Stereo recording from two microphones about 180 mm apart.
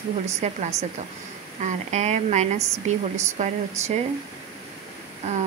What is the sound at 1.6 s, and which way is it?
Speech, 40° right (ahead or behind).